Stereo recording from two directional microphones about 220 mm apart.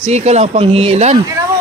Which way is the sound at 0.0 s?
30° right (ahead or behind).